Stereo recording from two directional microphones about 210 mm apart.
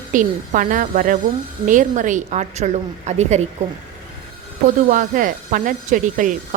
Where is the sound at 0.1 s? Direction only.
40° right (ahead or behind).